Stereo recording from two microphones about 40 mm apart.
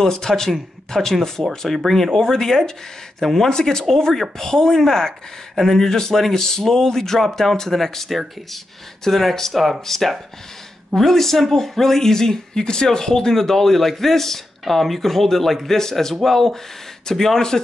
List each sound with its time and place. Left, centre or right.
0.0 s speech: centre
1.4 s speech: right
1.9 s speech: centre
3.4 s speech: centre